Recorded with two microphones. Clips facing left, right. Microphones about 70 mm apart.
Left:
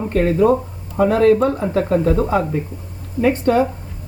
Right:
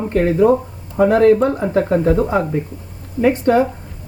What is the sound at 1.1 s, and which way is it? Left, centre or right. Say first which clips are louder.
Speech: right 1 dB; centre.